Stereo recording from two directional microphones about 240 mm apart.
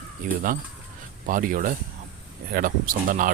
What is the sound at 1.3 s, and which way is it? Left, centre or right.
Speech, right.